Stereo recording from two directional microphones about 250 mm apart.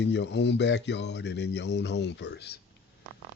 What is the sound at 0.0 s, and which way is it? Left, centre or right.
Speech, left.